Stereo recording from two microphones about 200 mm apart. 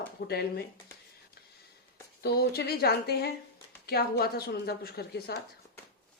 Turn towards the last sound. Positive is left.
turn(degrees=50)  # may be behind; listen again after turning